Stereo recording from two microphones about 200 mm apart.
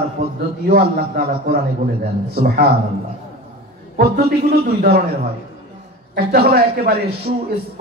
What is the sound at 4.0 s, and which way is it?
A man's voice, 50° right (ahead or behind).